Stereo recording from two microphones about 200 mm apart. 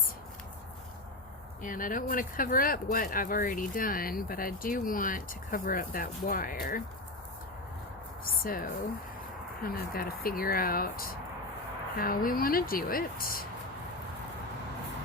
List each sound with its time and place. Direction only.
1.6 s speech: 45° left (ahead or behind)
8.2 s a sound: 45° left (ahead or behind)
9.6 s speech: 50° left (ahead or behind)